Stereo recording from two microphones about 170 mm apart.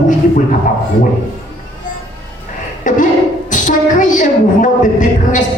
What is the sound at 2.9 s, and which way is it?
Speech, 50° left (ahead or behind).